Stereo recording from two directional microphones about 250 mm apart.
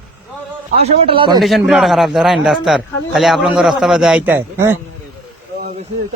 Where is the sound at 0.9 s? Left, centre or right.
Right.